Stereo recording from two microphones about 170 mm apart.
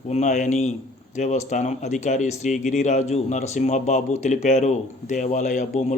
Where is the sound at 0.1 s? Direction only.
45° left (ahead or behind).